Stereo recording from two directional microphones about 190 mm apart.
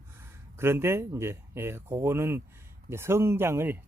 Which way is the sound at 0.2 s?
15° right (ahead or behind).